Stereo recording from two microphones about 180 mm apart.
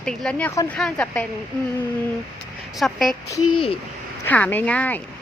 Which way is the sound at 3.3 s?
25° left (ahead or behind).